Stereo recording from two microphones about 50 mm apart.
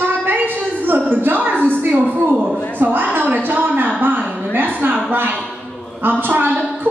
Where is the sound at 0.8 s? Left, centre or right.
Right.